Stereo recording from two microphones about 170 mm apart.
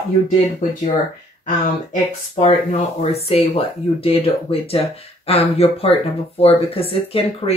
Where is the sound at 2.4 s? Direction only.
35° left (ahead or behind).